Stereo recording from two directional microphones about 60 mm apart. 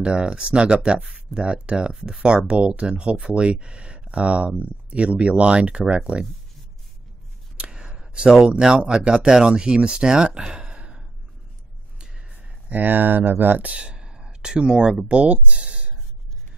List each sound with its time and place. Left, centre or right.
0.0 s speech: centre
7.5 s speech: centre
12.0 s gasp: centre
12.3 s speech: right